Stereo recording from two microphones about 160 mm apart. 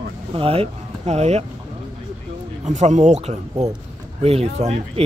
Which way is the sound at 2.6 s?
45° right (ahead or behind).